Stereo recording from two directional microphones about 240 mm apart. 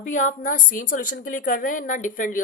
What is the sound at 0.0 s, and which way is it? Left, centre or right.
A woman's voice, left.